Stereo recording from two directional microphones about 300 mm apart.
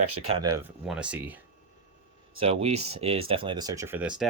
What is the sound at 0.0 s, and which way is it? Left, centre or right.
Speech, right.